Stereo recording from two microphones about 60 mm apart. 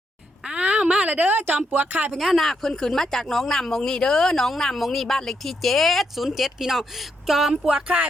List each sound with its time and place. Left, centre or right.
0.4 s a woman's voice: centre
2.1 s speech: centre
7.5 s speech: centre